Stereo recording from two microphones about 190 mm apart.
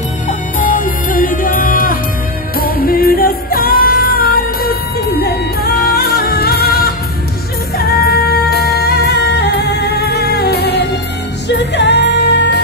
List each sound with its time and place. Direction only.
0.3 s music: 45° left (ahead or behind); by 12.5 s 65° left (ahead or behind)